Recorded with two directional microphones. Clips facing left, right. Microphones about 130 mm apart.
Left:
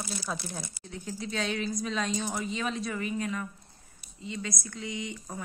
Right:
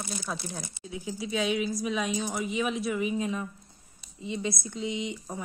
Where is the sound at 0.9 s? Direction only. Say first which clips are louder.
Right 3 dB; 10° right (ahead or behind).